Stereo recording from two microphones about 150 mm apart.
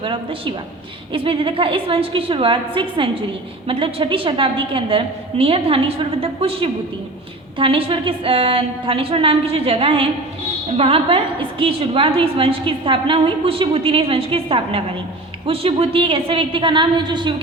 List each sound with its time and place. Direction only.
0.0 s a woman's voice: 35° right (ahead or behind)